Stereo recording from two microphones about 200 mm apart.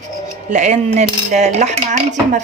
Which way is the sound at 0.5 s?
35° right (ahead or behind).